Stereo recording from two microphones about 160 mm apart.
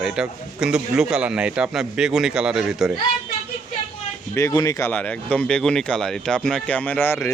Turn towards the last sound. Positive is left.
turn(degrees=10)  # may be behind; listen again after turning